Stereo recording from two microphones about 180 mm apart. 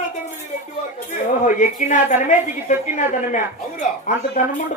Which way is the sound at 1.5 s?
45° left (ahead or behind).